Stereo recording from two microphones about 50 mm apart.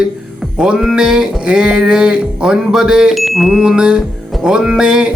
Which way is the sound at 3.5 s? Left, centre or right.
Centre.